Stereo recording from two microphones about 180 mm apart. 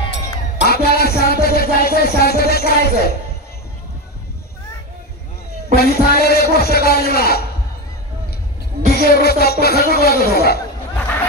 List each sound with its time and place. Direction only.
0.1 s music: 65° left (ahead or behind)
5.8 s music: 60° left (ahead or behind)
6.5 s a sound: 60° left (ahead or behind)
8.9 s speech: 60° left (ahead or behind)